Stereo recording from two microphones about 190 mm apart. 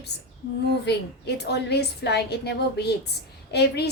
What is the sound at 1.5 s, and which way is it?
A woman's voice, 60° left (ahead or behind).